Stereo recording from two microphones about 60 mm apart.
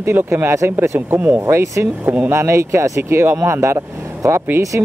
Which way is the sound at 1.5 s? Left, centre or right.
Right.